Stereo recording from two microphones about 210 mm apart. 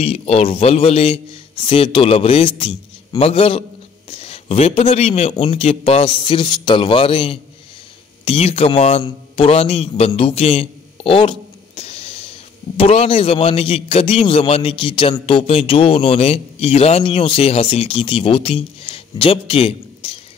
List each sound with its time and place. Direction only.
0.0 s a man's voice: 30° left (ahead or behind)